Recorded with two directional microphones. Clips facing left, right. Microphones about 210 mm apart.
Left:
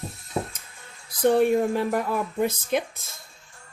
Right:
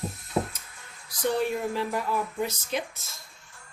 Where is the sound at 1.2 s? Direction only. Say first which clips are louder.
Left 7 dB; 55° left (ahead or behind).